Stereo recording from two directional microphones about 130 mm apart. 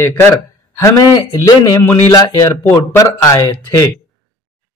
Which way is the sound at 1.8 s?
25° left (ahead or behind).